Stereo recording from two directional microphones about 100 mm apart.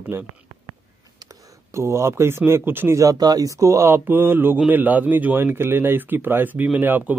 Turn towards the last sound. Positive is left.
turn(degrees=-20)  # may be behind; listen again after turning